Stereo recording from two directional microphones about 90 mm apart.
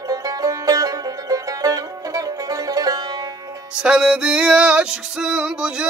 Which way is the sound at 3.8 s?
10° right (ahead or behind).